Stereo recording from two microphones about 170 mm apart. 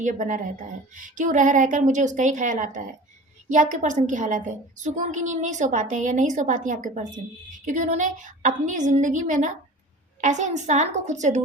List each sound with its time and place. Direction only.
0.0 s a woman's voice: 50° right (ahead or behind)